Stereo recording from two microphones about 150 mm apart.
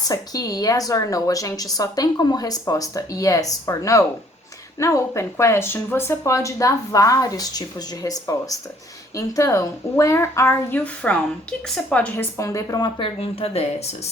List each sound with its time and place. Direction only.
0.1 s speech: 25° left (ahead or behind)
13.1 s speech: 40° left (ahead or behind)